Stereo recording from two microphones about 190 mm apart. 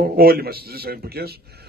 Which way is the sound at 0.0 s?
50° right (ahead or behind).